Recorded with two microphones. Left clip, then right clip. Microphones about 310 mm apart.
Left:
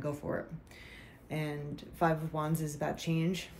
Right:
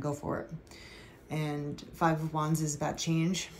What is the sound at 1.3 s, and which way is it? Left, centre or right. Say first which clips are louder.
Speech: right 2 dB; centre.